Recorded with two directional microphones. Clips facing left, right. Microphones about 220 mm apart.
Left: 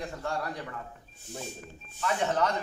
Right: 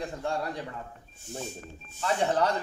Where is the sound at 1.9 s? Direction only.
30° right (ahead or behind).